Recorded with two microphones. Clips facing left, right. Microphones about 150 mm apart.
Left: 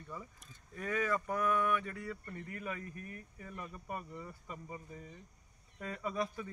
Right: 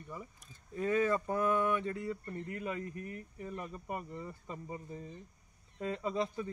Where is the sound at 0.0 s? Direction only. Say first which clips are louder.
Right 1 dB; 15° right (ahead or behind).